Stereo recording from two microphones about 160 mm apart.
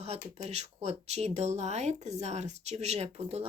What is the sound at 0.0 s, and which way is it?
Speech, 40° right (ahead or behind).